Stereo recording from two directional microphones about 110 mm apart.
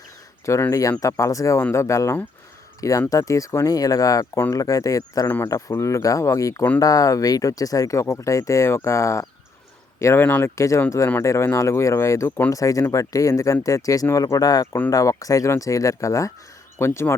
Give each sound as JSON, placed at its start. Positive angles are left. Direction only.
{"t": 0.4, "sound": "speech", "side_deg": 25}
{"t": 10.5, "sound": "speech", "side_deg": 30}